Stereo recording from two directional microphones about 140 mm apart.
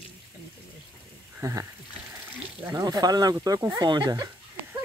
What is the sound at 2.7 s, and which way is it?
Speech, 25° right (ahead or behind).